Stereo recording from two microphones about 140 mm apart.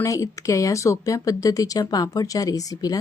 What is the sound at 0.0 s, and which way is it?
Speech, 25° left (ahead or behind).